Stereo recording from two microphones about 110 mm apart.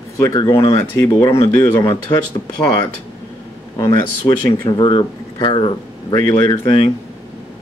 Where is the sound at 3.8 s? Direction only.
35° left (ahead or behind).